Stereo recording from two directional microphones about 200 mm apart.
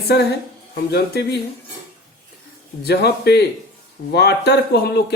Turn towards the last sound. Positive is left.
turn(degrees=55)  # may be behind; listen again after turning